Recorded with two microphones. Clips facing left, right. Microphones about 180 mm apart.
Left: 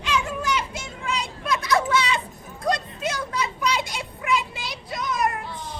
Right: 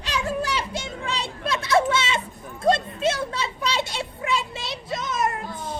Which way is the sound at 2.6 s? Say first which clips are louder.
Right 5 dB; 30° right (ahead or behind).